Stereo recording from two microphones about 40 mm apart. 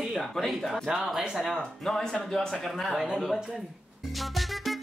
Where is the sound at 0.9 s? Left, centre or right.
Right.